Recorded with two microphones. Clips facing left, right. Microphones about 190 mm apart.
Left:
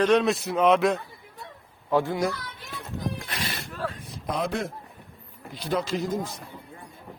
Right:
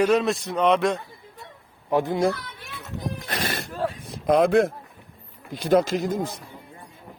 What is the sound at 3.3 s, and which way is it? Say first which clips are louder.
Horse: right 5 dB; 45° right (ahead or behind).